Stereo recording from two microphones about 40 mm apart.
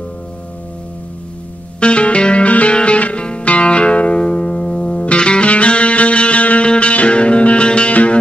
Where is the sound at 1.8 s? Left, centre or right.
Left.